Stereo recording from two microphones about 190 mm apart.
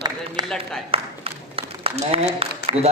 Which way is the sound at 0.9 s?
30° right (ahead or behind).